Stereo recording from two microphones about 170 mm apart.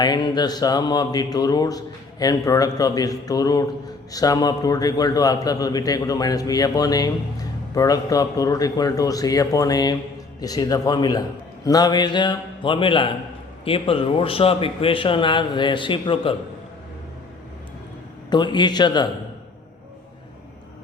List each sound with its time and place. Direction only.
0.0 s speech: 25° left (ahead or behind)
18.3 s speech: 25° left (ahead or behind)